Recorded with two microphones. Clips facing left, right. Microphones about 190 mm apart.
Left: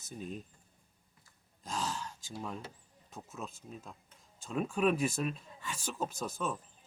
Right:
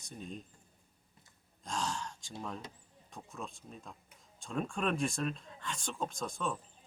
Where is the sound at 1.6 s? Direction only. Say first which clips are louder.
Even; centre (ahead or behind).